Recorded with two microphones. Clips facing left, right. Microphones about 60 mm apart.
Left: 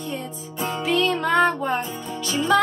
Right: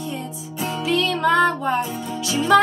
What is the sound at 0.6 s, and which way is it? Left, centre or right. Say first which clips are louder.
Music: even; left.